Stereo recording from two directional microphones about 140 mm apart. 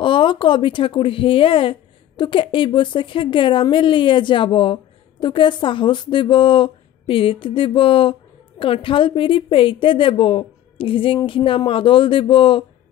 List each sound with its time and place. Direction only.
0.0 s speech: 35° left (ahead or behind)